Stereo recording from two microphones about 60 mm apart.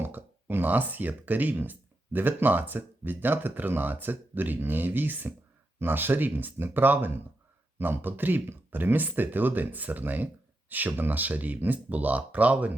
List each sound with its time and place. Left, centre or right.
0.0 s speech: right